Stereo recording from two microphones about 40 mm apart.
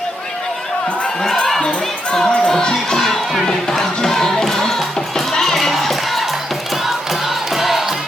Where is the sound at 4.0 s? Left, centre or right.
Centre.